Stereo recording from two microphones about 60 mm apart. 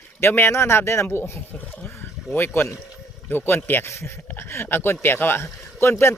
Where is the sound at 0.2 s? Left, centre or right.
Left.